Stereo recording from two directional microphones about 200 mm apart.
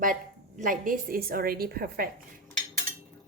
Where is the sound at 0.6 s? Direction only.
40° right (ahead or behind).